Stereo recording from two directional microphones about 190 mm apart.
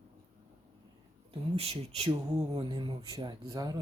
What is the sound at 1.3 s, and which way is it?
Speech, 30° right (ahead or behind).